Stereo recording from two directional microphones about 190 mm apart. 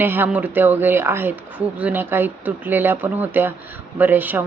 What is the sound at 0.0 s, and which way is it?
A woman's voice, 10° right (ahead or behind).